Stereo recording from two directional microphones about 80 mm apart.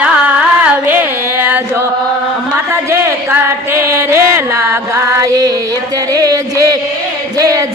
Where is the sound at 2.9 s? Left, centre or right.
Right.